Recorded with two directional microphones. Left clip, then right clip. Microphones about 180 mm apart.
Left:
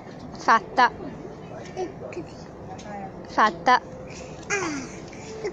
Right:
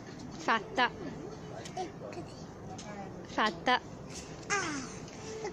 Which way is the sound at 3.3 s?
10° right (ahead or behind).